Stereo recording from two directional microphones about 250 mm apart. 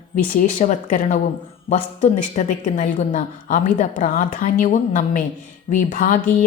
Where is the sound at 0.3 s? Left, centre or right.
Left.